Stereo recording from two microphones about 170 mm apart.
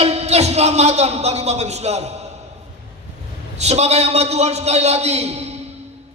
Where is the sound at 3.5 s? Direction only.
40° right (ahead or behind).